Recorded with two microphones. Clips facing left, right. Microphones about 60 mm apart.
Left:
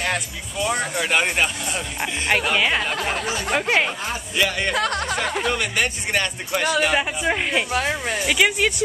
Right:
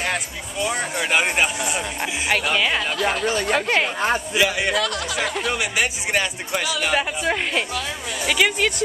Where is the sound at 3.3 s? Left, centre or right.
Right.